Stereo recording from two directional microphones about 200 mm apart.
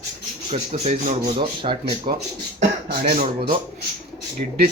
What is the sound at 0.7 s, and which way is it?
Speech, 35° right (ahead or behind).